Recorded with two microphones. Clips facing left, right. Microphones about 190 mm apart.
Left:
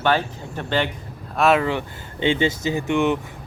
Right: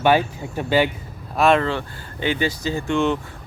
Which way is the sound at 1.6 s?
20° left (ahead or behind).